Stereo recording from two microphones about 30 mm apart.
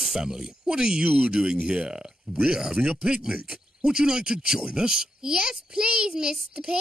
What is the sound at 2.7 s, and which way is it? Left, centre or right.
Speech, right.